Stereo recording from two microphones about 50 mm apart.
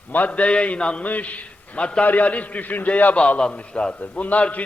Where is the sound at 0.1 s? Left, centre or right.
Left.